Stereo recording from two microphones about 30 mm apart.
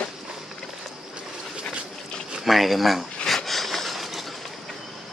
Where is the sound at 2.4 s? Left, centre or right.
Centre.